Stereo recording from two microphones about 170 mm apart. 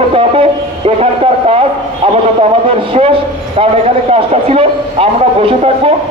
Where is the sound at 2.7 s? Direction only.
35° right (ahead or behind).